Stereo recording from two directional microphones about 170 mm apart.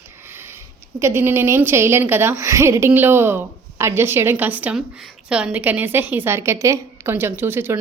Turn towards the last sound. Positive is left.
turn(degrees=-15)  # may be behind; listen again after turning